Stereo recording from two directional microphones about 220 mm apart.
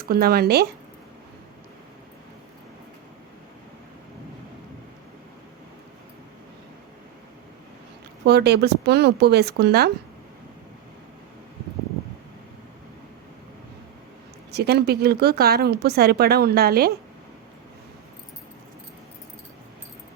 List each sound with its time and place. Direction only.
0.0 s speech: 45° right (ahead or behind)
8.2 s speech: 50° right (ahead or behind)
14.5 s speech: 45° right (ahead or behind)